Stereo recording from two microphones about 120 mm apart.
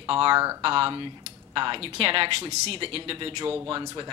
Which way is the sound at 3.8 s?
30° right (ahead or behind).